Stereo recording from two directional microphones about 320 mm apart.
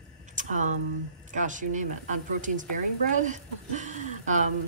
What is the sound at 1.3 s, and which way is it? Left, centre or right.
A woman's voice, right.